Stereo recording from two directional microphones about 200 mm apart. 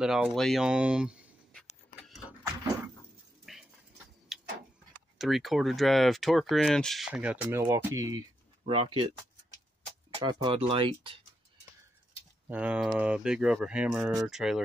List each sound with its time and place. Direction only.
0.0 s speech: centre (ahead or behind)
2.0 s a sound: centre (ahead or behind)
3.5 s a sound: centre (ahead or behind)
4.3 s tick-tock: centre (ahead or behind)
5.2 s speech: centre (ahead or behind)
8.6 s speech: 30° right (ahead or behind)
10.2 s speech: 25° right (ahead or behind)
12.4 s speech: 5° right (ahead or behind)